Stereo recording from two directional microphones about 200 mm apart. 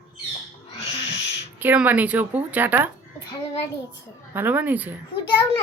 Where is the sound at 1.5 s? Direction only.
10° right (ahead or behind).